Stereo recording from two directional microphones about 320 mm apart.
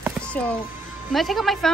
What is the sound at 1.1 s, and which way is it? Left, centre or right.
Speech, centre.